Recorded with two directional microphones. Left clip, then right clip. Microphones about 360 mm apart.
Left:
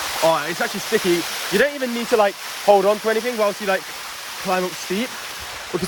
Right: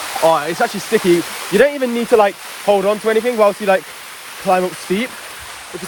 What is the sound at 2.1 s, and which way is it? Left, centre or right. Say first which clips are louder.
Speech: right 5 dB; centre.